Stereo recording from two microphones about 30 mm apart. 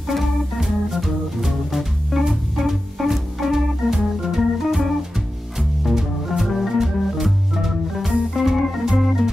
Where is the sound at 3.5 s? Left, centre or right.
Centre.